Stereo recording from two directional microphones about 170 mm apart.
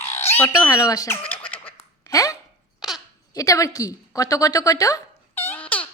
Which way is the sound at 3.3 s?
20° left (ahead or behind).